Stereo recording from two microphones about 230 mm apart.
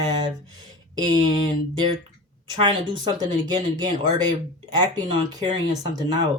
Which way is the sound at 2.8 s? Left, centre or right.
Right.